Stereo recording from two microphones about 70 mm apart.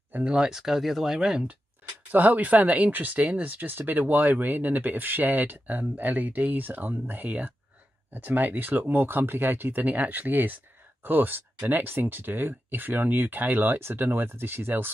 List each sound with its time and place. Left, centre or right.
0.1 s speech: centre
2.0 s speech: right